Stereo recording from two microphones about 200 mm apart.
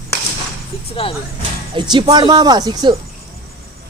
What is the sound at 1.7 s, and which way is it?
Speech, 25° right (ahead or behind).